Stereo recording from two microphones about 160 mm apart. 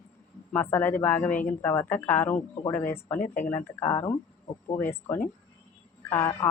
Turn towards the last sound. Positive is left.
turn(degrees=20)  # may be behind; listen again after turning